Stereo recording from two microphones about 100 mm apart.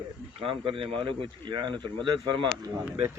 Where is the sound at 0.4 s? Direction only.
60° right (ahead or behind).